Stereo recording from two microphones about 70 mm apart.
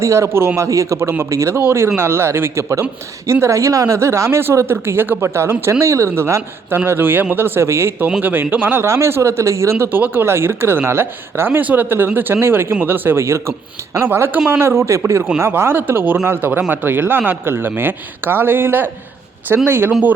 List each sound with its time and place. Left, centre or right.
0.0 s a man's voice: right
3.4 s speech: right